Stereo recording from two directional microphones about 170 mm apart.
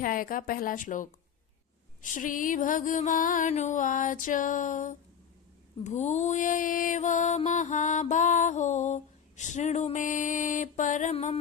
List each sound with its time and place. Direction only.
0.0 s mantra: 55° left (ahead or behind)